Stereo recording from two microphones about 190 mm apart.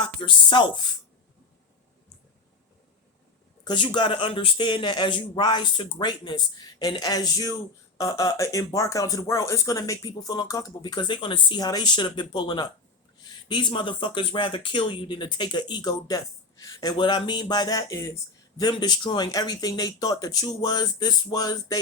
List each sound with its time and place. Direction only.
0.0 s speech: 25° left (ahead or behind)
3.6 s speech: 25° left (ahead or behind)